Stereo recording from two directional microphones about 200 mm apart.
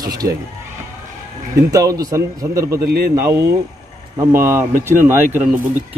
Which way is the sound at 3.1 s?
15° right (ahead or behind).